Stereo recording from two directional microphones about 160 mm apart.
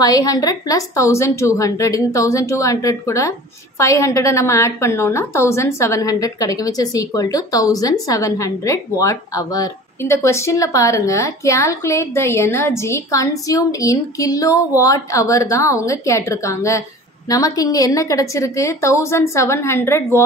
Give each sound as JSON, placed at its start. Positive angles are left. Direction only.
{"t": 0.0, "sound": "a woman's voice", "side_deg": 25}